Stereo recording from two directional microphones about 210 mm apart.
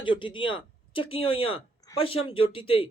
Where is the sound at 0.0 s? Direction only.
25° left (ahead or behind).